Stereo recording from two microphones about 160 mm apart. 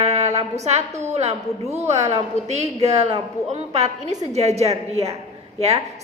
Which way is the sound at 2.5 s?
45° right (ahead or behind).